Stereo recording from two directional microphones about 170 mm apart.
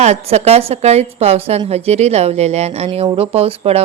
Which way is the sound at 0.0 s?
40° right (ahead or behind).